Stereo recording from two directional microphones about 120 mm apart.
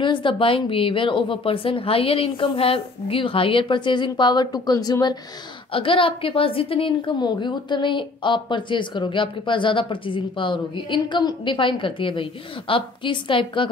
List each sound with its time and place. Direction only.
0.0 s a woman's voice: 45° left (ahead or behind)
5.7 s a woman's voice: 50° left (ahead or behind)